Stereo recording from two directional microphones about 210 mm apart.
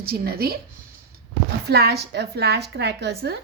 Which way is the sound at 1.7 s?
50° right (ahead or behind).